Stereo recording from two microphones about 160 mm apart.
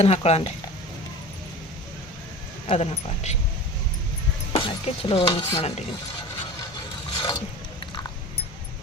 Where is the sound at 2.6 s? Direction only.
40° left (ahead or behind).